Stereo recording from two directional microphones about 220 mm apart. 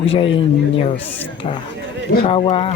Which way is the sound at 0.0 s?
25° left (ahead or behind).